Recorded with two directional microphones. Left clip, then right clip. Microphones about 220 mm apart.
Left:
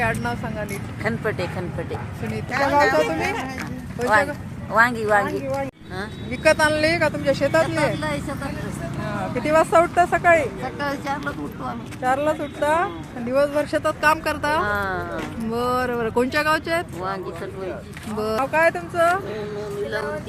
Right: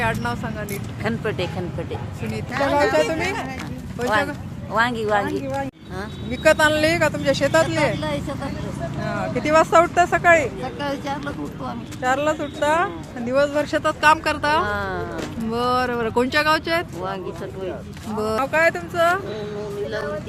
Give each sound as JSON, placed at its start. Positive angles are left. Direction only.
{"t": 0.0, "sound": "speech", "side_deg": 0}
{"t": 1.0, "sound": "speech", "side_deg": -10}
{"t": 2.5, "sound": "speech", "side_deg": 25}
{"t": 2.9, "sound": "speech", "side_deg": 10}
{"t": 18.2, "sound": "speech", "side_deg": -5}